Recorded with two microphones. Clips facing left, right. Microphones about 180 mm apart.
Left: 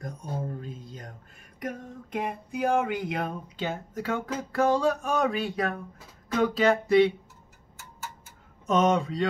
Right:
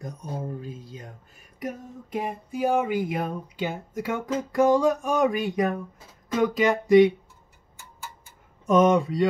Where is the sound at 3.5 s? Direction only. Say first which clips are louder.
Right 1 dB; 15° right (ahead or behind).